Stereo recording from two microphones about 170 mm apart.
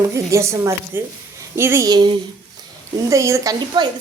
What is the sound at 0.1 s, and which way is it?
A woman's voice, 15° right (ahead or behind).